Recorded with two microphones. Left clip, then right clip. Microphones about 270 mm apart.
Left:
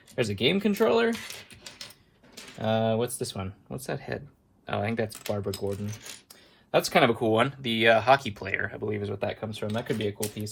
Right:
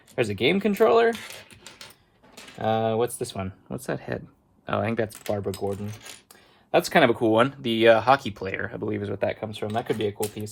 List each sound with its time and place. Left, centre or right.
0.2 s speech: right
2.6 s speech: right
5.9 s speech: centre
6.7 s speech: right
9.0 s speech: right